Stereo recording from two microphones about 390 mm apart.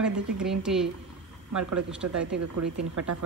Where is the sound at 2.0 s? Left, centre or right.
Right.